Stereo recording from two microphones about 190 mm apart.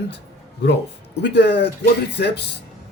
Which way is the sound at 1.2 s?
65° left (ahead or behind).